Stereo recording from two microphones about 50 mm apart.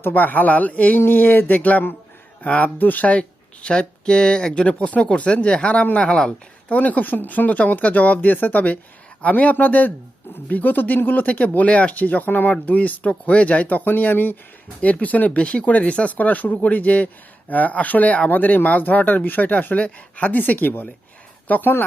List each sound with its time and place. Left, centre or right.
0.0 s speech: left; by 6.3 s centre
6.7 s speech: left